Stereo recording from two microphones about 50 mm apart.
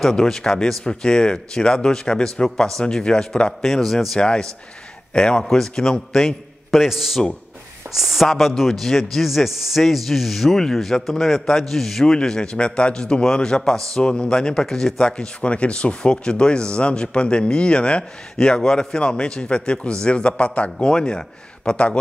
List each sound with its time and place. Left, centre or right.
0.0 s speech: centre
3.6 s a man's voice: centre
4.2 s a man's voice: centre